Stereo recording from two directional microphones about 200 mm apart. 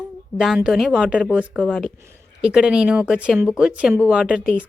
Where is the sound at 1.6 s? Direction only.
5° left (ahead or behind).